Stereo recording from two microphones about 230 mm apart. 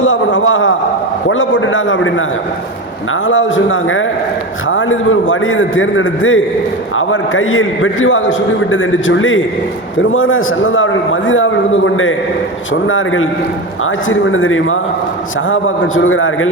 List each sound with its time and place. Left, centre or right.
0.0 s a sound: left
1.3 s a man's voice: left
3.2 s a man's voice: left